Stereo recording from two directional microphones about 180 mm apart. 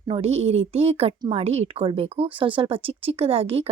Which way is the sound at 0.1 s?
35° right (ahead or behind).